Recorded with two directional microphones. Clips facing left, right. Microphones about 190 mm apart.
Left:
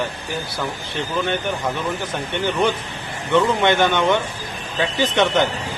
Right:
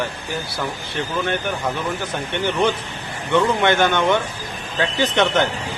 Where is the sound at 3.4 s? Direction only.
15° left (ahead or behind).